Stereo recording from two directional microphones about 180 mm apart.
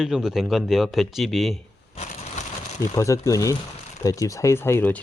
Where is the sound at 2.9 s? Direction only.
15° left (ahead or behind).